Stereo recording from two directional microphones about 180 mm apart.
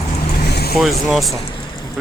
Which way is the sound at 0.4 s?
60° left (ahead or behind).